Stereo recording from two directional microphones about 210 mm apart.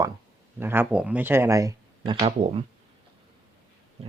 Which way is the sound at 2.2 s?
30° right (ahead or behind).